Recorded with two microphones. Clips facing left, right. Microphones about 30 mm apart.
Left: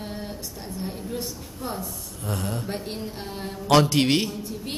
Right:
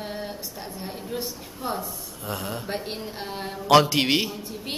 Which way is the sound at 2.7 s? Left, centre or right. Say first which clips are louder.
Even; centre.